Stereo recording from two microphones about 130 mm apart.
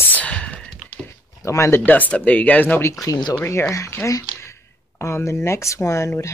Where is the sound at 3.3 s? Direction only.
20° left (ahead or behind).